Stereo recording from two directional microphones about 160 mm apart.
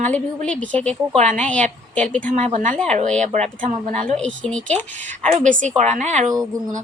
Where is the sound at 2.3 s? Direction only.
50° right (ahead or behind).